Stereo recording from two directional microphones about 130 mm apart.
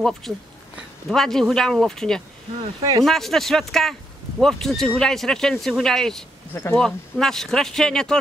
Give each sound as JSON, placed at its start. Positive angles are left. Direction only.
{"t": 0.3, "sound": "speech", "side_deg": 0}
{"t": 6.5, "sound": "speech", "side_deg": 15}
{"t": 6.8, "sound": "speech", "side_deg": 5}